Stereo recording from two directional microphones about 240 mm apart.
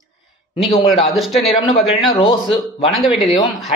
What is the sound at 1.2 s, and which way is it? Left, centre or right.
Speech, centre.